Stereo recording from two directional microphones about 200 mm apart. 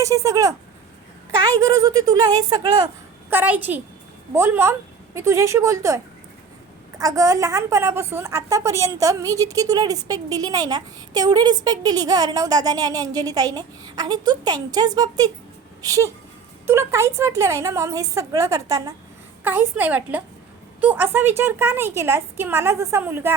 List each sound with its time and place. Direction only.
0.0 s a woman's voice: 15° right (ahead or behind)
1.5 s a woman's voice: 15° right (ahead or behind)
7.0 s a woman's voice: 15° right (ahead or behind)